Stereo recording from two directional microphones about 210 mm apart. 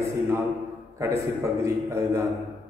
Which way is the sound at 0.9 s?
15° right (ahead or behind).